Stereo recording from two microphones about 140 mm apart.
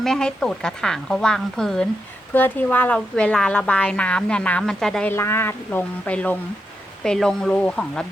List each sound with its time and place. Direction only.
0.0 s speech: 5° left (ahead or behind)
5.1 s speech: 20° left (ahead or behind)